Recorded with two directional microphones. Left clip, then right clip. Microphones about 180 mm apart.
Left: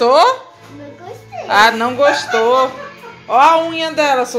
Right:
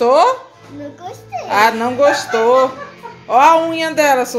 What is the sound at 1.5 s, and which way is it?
A woman's voice, 5° right (ahead or behind).